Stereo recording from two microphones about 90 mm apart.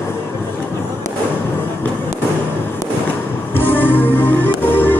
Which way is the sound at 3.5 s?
20° left (ahead or behind).